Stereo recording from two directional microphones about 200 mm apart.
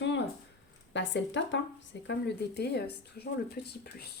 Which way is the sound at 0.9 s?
65° left (ahead or behind).